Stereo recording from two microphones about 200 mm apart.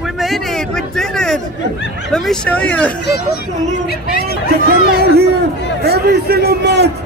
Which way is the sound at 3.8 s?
50° left (ahead or behind).